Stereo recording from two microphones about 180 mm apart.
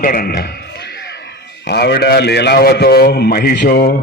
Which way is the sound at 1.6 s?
65° left (ahead or behind).